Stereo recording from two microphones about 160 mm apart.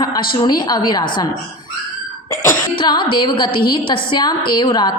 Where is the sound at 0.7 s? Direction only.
25° left (ahead or behind).